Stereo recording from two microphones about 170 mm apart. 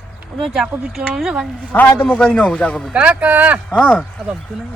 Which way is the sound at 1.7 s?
10° left (ahead or behind).